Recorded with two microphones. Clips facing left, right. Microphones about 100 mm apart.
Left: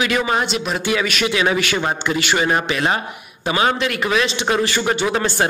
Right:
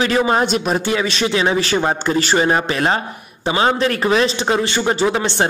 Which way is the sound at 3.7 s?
35° right (ahead or behind).